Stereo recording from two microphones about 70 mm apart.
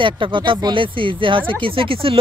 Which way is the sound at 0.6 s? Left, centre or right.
Right.